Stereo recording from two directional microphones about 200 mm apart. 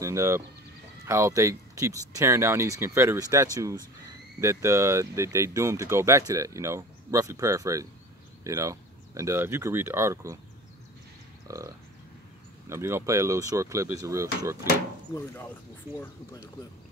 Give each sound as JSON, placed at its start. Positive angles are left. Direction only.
{"t": 0.0, "sound": "speech", "side_deg": -15}
{"t": 11.4, "sound": "speech", "side_deg": -15}
{"t": 15.1, "sound": "speech", "side_deg": 10}